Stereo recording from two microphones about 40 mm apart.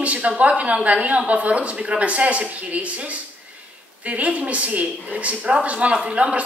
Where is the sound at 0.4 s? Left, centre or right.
Right.